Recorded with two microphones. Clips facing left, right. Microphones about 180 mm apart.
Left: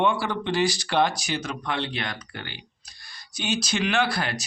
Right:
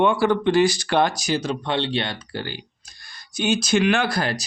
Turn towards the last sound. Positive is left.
turn(degrees=-40)  # may be behind; listen again after turning